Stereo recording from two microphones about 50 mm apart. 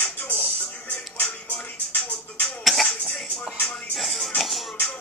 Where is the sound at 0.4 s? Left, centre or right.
Left.